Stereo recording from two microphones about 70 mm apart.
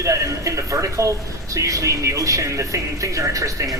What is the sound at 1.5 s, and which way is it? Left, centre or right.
Speech, right.